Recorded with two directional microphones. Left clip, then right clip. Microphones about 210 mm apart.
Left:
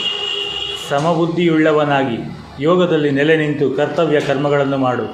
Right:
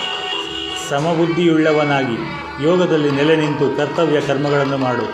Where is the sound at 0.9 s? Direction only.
15° right (ahead or behind).